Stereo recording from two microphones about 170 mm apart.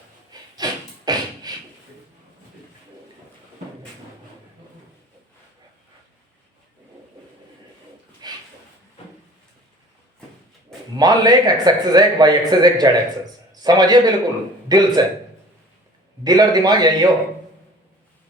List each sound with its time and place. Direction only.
0.5 s beatboxing: 25° right (ahead or behind)
8.2 s a sound: 25° right (ahead or behind)
10.9 s a man's voice: 25° right (ahead or behind)
16.2 s a man's voice: 25° right (ahead or behind)